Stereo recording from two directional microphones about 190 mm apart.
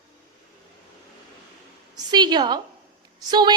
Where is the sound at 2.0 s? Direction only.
20° right (ahead or behind).